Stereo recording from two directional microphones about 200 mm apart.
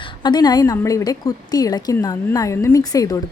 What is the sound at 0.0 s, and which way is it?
A woman's voice, 25° left (ahead or behind).